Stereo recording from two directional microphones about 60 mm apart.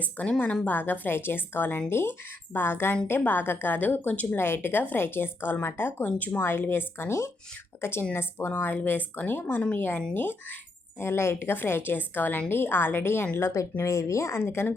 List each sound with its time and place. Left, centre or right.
0.0 s a woman's voice: left
4.4 s speech: left
6.4 s speech: left
11.0 s speech: left
13.8 s speech: left
14.3 s speech: left